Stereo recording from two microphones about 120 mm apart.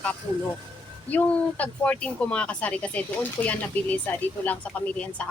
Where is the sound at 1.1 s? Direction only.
10° left (ahead or behind).